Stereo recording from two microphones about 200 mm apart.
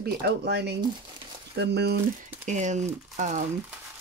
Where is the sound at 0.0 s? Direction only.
55° right (ahead or behind).